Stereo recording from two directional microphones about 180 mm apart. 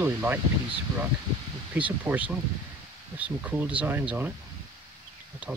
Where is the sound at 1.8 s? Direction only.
10° right (ahead or behind).